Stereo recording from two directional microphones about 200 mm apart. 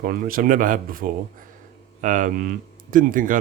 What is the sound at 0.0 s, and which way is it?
Speech, 45° right (ahead or behind).